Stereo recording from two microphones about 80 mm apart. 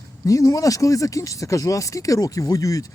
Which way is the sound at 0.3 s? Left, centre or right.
Left.